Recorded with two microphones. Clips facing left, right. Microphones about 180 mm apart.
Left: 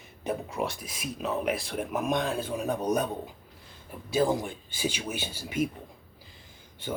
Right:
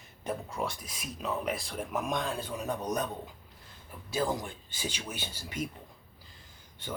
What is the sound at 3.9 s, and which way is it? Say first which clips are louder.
Speech: left 6 dB; 25° left (ahead or behind).